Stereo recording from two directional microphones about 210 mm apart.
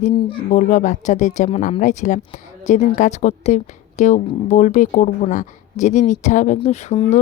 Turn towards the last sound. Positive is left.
turn(degrees=30)  # may be behind; listen again after turning